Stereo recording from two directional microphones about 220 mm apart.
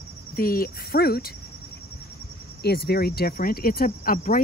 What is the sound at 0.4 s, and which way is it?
Cricket, 40° left (ahead or behind).